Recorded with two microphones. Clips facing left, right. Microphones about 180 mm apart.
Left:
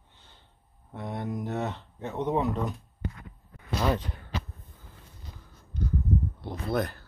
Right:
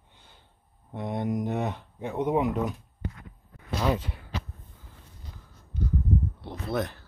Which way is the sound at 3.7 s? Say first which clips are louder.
Even; 5° right (ahead or behind).